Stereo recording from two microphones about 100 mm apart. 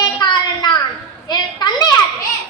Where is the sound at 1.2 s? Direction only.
45° left (ahead or behind).